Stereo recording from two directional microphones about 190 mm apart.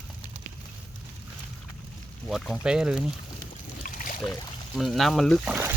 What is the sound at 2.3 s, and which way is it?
Speech, centre (ahead or behind).